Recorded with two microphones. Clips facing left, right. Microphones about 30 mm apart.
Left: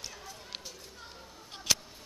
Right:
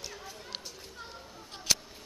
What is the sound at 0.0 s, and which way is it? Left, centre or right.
Run, centre.